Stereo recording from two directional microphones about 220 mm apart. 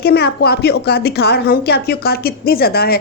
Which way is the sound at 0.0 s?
45° left (ahead or behind).